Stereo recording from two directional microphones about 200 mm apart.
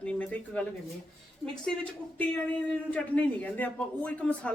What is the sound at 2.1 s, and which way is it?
A man's voice, 5° left (ahead or behind).